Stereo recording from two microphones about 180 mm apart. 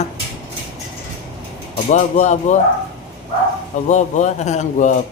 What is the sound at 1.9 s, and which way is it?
Speech, 40° left (ahead or behind).